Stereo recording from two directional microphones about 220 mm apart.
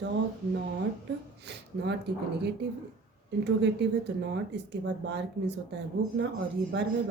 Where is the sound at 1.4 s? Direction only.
50° right (ahead or behind).